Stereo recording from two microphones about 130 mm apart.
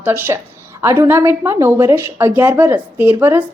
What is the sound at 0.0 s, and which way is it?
A woman's voice, 15° right (ahead or behind).